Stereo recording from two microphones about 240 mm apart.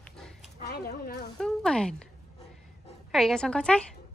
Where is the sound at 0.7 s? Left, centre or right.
Left.